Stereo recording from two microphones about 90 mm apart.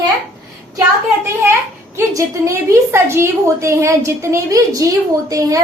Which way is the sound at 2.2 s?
35° right (ahead or behind).